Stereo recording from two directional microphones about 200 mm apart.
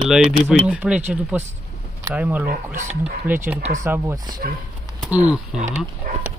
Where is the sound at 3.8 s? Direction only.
15° right (ahead or behind).